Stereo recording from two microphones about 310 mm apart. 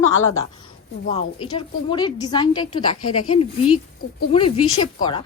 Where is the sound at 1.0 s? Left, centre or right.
Centre.